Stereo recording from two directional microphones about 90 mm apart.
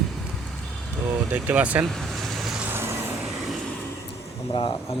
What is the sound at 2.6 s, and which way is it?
Vehicle, 25° right (ahead or behind).